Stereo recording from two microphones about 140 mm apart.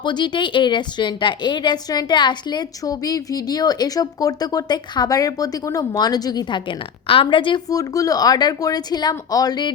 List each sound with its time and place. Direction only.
0.0 s a woman's voice: 35° left (ahead or behind)